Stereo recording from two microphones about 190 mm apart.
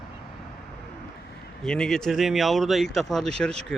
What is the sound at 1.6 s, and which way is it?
Speech, 5° left (ahead or behind).